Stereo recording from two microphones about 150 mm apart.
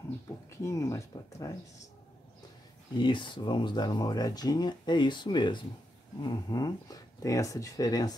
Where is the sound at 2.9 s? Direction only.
35° left (ahead or behind).